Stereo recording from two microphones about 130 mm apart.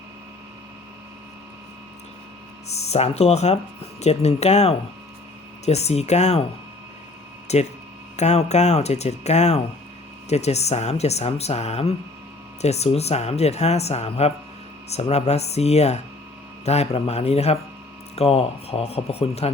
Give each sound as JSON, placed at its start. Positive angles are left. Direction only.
{"t": 2.6, "sound": "speech", "side_deg": 55}
{"t": 7.4, "sound": "a sound", "side_deg": 55}
{"t": 8.1, "sound": "speech", "side_deg": 60}